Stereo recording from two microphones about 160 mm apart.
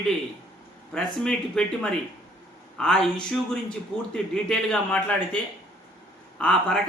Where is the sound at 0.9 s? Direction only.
5° left (ahead or behind).